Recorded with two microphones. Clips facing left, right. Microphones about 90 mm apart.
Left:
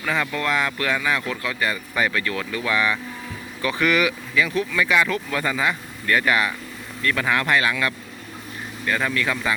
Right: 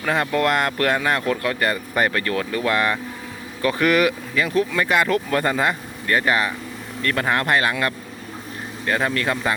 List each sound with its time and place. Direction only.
0.0 s speech: 45° right (ahead or behind)
6.1 s speech: 30° right (ahead or behind)
7.0 s speech: 45° right (ahead or behind)